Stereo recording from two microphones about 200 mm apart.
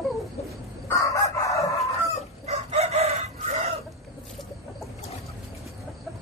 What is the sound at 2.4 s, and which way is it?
Chicken, 30° right (ahead or behind).